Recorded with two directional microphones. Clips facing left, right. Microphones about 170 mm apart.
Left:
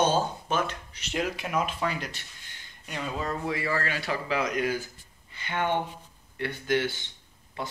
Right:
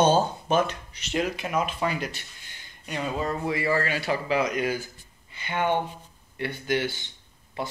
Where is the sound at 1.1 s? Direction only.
Centre (ahead or behind).